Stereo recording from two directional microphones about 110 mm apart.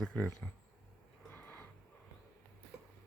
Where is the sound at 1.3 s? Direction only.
15° left (ahead or behind).